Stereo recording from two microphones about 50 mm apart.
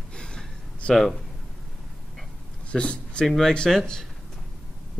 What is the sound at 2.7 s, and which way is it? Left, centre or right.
Speech, left.